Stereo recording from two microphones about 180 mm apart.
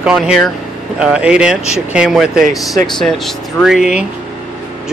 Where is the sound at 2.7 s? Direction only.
25° left (ahead or behind).